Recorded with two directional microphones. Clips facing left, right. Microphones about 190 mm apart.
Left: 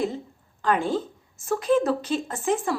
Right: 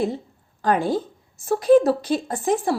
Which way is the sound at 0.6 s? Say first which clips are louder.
Right 3 dB; 35° right (ahead or behind).